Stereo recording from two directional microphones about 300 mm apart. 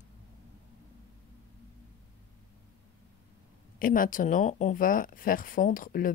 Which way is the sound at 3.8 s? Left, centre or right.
Left.